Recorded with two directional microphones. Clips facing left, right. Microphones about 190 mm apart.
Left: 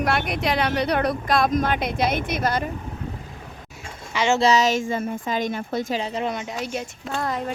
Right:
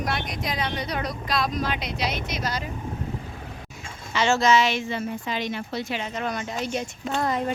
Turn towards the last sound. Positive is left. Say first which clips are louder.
# right 2 dB
turn(degrees=0)  # may be behind; listen again after turning